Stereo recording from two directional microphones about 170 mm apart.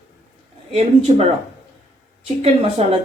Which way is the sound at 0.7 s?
40° right (ahead or behind).